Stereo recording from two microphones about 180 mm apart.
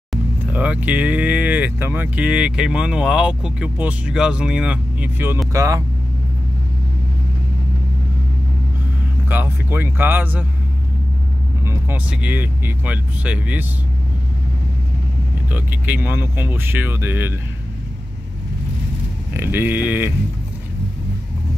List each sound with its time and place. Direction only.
0.1 s speech: 5° right (ahead or behind)
9.3 s speech: 10° right (ahead or behind)
11.6 s speech: 10° right (ahead or behind)
15.5 s speech: 10° right (ahead or behind)
19.3 s speech: 10° right (ahead or behind)